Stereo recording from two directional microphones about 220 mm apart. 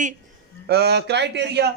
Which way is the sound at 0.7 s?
45° right (ahead or behind).